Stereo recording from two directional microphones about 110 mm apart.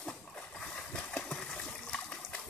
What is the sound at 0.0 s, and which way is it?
Water, 5° left (ahead or behind).